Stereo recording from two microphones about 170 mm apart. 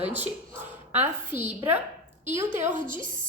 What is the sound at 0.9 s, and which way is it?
A woman's voice, 10° right (ahead or behind).